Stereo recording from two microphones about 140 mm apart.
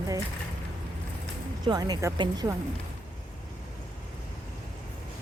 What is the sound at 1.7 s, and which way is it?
Speech, 30° right (ahead or behind).